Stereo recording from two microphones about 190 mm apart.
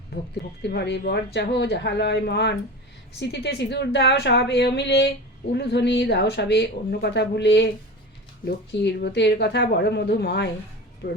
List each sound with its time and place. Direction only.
0.7 s speech: 60° left (ahead or behind)